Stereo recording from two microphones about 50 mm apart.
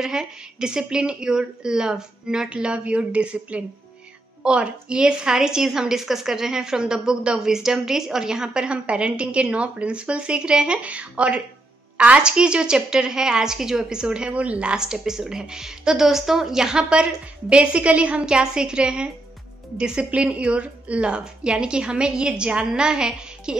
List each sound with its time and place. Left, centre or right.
0.0 s a woman's voice: centre